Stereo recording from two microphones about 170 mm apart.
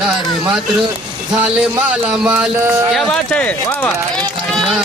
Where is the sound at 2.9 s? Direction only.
5° left (ahead or behind).